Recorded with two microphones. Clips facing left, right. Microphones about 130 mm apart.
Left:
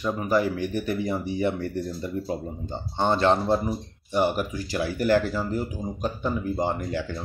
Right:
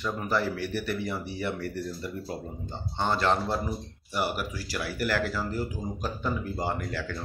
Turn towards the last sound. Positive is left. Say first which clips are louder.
# left 4 dB
turn(degrees=20)  # may be behind; listen again after turning